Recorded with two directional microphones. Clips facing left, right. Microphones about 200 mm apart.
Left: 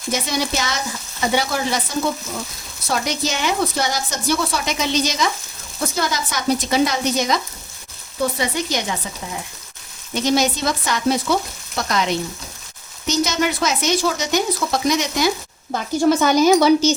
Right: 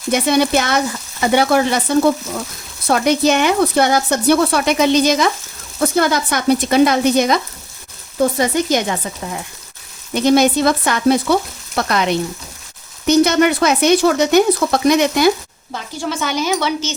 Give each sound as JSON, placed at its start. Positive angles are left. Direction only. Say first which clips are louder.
{"t": 0.1, "sound": "speech", "louder": "right 8 dB", "side_deg": -60}
{"t": 10.2, "sound": "speech", "louder": "right 7 dB", "side_deg": -55}
{"t": 13.1, "sound": "speech", "louder": "right 8 dB", "side_deg": -60}
{"t": 15.7, "sound": "a woman's voice", "louder": "left 7 dB", "side_deg": 45}